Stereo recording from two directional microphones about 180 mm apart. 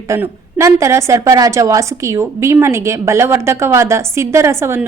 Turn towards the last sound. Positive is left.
turn(degrees=-15)  # may be behind; listen again after turning